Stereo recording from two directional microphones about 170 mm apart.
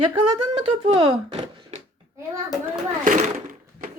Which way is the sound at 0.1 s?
25° right (ahead or behind).